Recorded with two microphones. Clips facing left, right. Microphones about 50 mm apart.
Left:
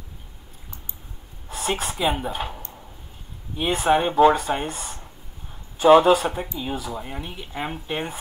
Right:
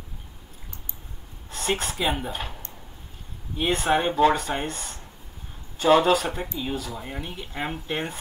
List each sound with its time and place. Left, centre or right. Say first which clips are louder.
1.5 s speech: left 1 dB; centre
5.9 s speech: left 5 dB; centre
6.1 s speech: left 2 dB; centre
7.0 s speech: left 1 dB; centre